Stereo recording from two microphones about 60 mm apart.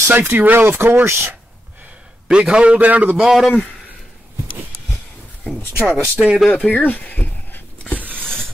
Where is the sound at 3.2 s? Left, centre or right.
Centre.